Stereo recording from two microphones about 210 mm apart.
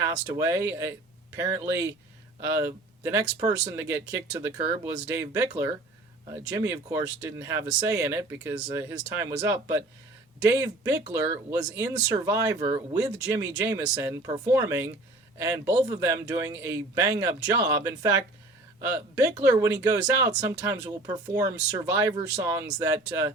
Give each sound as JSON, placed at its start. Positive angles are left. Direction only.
{"t": 0.0, "sound": "speech", "side_deg": -15}
{"t": 19.5, "sound": "speech", "side_deg": -15}